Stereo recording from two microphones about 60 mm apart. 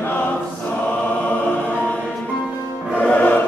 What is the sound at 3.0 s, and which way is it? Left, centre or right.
Music, left.